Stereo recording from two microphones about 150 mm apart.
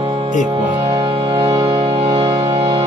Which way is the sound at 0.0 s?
40° right (ahead or behind).